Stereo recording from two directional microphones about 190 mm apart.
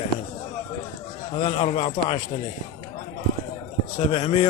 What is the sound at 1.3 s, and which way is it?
Speech, 30° left (ahead or behind).